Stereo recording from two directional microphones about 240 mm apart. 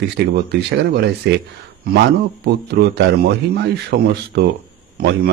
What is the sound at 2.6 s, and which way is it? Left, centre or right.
A man's voice, right.